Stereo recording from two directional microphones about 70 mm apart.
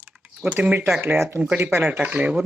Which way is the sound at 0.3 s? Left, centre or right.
Centre.